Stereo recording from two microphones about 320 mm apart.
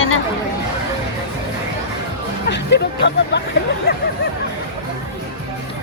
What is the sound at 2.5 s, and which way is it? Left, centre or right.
Hubbub, left.